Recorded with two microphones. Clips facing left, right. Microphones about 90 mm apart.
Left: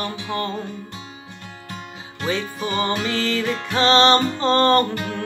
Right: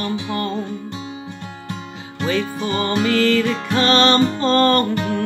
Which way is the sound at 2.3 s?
20° left (ahead or behind).